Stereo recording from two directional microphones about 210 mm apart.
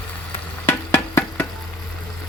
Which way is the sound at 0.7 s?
10° left (ahead or behind).